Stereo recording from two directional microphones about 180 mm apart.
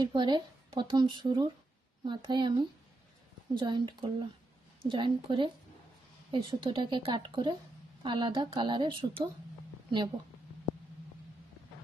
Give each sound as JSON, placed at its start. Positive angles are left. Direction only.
{"t": 0.0, "sound": "speech", "side_deg": -25}